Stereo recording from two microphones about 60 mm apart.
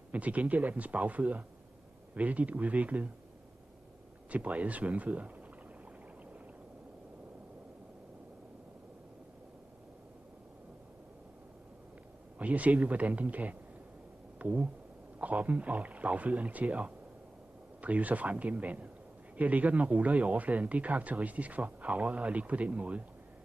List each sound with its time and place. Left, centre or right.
0.1 s speech: right
4.3 s speech: right
12.4 s speech: right